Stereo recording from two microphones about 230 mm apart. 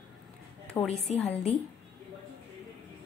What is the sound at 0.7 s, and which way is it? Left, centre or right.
Speech, centre.